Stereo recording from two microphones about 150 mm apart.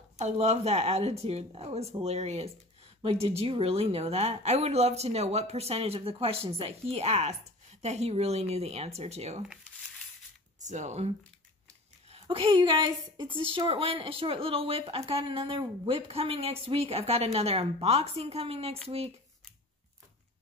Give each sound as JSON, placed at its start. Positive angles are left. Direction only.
{"t": 0.2, "sound": "speech", "side_deg": -45}
{"t": 10.7, "sound": "a woman's voice", "side_deg": -50}